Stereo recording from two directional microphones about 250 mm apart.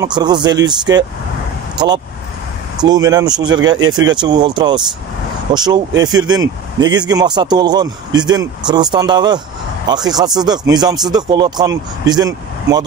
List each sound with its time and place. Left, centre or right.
0.0 s speech: centre
2.8 s speech: centre